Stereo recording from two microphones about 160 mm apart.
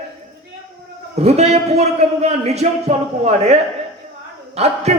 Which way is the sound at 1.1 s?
40° right (ahead or behind).